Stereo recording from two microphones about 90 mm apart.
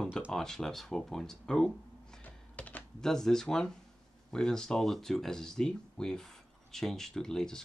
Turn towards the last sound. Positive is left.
turn(degrees=5)  # may be behind; listen again after turning